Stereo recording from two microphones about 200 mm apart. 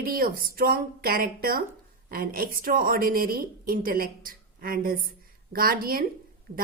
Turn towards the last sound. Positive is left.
turn(degrees=-50)  # may be behind; listen again after turning